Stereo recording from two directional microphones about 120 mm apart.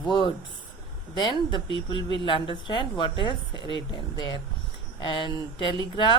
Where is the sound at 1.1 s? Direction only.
40° left (ahead or behind).